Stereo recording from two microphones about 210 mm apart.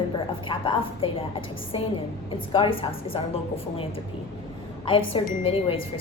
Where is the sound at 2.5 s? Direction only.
25° left (ahead or behind).